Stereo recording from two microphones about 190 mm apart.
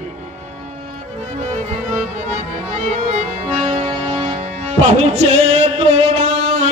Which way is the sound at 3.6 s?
40° right (ahead or behind).